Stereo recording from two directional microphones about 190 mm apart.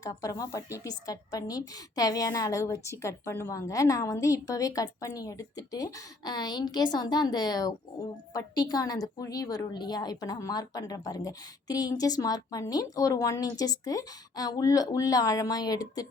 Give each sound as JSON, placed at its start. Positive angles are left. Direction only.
{"t": 0.0, "sound": "a woman's voice", "side_deg": 20}